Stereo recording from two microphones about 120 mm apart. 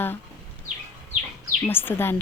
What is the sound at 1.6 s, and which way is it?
Speech, 20° left (ahead or behind).